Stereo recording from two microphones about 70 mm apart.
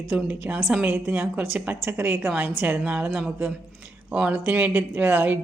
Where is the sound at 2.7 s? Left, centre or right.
Right.